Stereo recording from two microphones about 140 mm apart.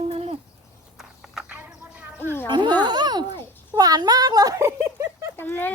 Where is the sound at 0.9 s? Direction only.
5° right (ahead or behind).